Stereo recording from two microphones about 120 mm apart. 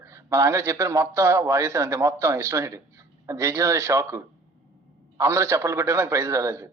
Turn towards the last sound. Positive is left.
turn(degrees=-25)  # may be behind; listen again after turning